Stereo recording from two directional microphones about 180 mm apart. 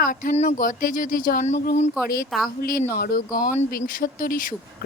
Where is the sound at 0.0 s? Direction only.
50° left (ahead or behind).